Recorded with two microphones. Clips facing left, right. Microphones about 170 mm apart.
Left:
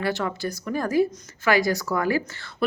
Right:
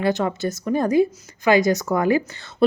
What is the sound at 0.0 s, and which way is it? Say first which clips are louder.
Speech: right 5 dB; 20° right (ahead or behind).